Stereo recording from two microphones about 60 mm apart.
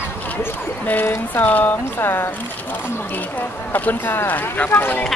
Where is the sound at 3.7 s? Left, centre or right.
Left.